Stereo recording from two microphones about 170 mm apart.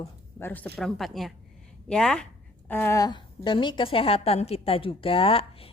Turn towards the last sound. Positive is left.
turn(degrees=35)  # may be behind; listen again after turning